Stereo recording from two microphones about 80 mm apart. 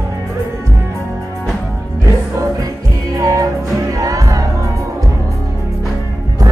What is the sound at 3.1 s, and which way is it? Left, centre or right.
Music, right.